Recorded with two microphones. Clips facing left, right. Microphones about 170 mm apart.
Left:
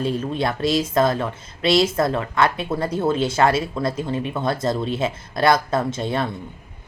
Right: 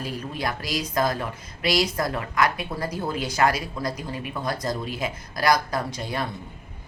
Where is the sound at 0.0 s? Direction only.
25° left (ahead or behind).